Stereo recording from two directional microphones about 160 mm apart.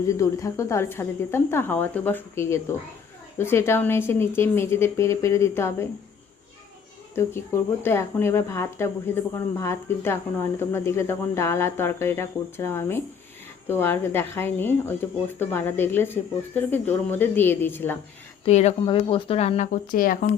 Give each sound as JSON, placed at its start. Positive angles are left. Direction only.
{"t": 0.1, "sound": "speech", "side_deg": 20}
{"t": 7.2, "sound": "speech", "side_deg": 15}
{"t": 18.4, "sound": "speech", "side_deg": 45}
{"t": 18.8, "sound": "speech", "side_deg": 35}